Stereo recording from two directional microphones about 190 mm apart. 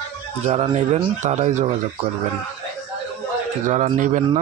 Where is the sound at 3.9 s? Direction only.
40° right (ahead or behind).